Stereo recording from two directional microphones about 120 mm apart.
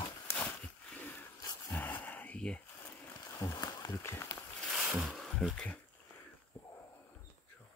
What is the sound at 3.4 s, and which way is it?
Speech, 30° left (ahead or behind).